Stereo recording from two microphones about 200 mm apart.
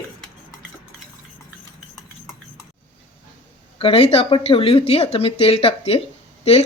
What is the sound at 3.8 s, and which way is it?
Speech, 30° left (ahead or behind).